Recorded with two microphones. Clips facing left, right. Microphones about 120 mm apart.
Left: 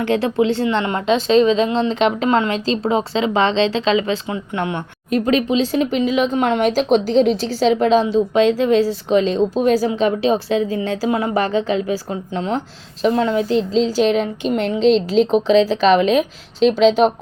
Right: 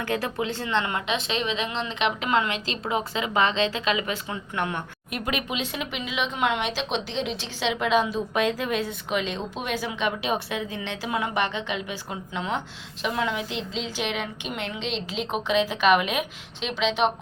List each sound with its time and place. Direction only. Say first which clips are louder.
0.0 s speech: left 10 dB; 25° left (ahead or behind); by 17.1 s 40° left (ahead or behind)